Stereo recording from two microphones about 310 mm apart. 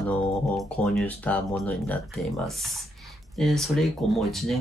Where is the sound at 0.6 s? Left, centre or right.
Centre.